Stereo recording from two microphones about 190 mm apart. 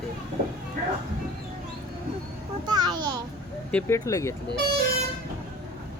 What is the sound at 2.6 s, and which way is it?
Speech, 20° right (ahead or behind).